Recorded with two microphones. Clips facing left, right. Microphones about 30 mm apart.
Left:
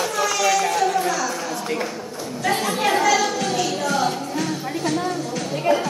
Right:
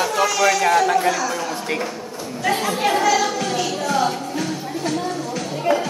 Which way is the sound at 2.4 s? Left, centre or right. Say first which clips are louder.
Right 1 dB; centre.